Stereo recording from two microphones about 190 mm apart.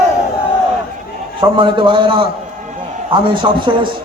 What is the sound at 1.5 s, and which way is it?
A man's voice, 25° right (ahead or behind).